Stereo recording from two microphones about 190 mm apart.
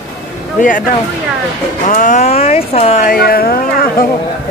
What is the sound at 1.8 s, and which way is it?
Speech, 45° left (ahead or behind).